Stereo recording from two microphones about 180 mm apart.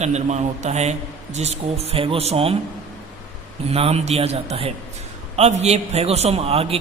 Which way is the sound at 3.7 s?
35° right (ahead or behind).